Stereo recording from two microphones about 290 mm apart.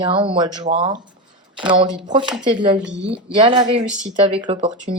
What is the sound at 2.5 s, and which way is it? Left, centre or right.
Speech, centre.